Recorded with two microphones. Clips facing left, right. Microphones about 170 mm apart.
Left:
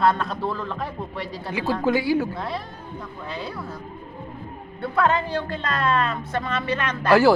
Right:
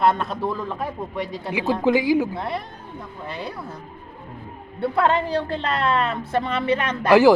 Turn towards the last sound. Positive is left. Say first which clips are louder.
# right 2 dB
turn(degrees=-15)  # may be behind; listen again after turning